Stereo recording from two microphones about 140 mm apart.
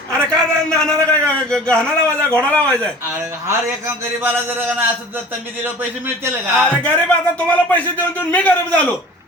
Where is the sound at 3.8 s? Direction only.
15° right (ahead or behind).